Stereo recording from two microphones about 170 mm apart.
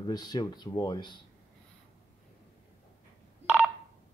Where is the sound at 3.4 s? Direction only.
5° right (ahead or behind).